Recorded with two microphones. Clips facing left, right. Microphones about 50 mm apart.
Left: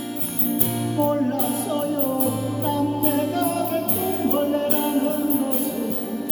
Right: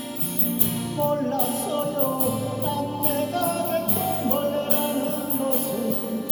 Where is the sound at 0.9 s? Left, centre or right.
Centre.